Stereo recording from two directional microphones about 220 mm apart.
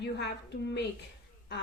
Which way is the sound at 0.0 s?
50° left (ahead or behind).